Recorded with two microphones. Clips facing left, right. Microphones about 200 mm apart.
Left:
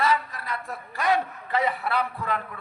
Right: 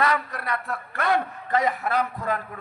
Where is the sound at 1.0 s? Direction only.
55° right (ahead or behind).